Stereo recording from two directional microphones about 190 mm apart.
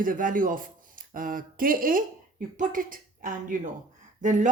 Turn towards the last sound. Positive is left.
turn(degrees=-40)  # may be behind; listen again after turning